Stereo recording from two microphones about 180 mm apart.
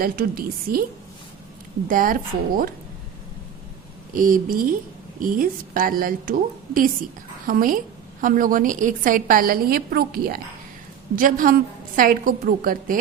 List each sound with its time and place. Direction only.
0.0 s a woman's voice: 55° right (ahead or behind)
1.9 s a woman's voice: 50° right (ahead or behind)
4.1 s a woman's voice: 50° right (ahead or behind)
7.4 s a woman's voice: 50° right (ahead or behind)